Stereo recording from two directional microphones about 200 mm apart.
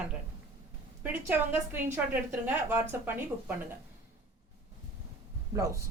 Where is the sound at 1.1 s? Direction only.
10° right (ahead or behind).